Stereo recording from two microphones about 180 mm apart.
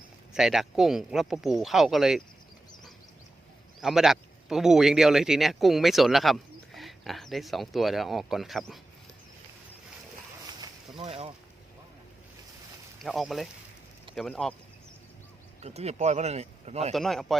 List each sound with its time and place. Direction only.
0.3 s speech: centre (ahead or behind)
3.8 s speech: centre (ahead or behind)
10.6 s a sound: 25° right (ahead or behind)
13.0 s speech: centre (ahead or behind)
15.6 s speech: 35° right (ahead or behind)
16.9 s speech: centre (ahead or behind)